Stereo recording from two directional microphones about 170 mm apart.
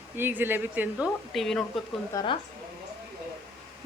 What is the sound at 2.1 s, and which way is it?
Speech, 25° left (ahead or behind).